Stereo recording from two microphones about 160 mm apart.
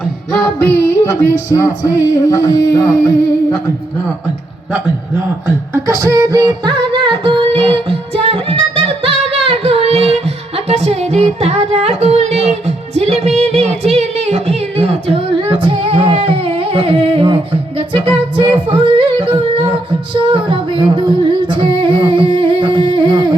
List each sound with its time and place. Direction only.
0.0 s speech: 5° left (ahead or behind)
4.7 s a sound: 15° right (ahead or behind); by 19.8 s 35° right (ahead or behind)
20.3 s singing: 30° right (ahead or behind)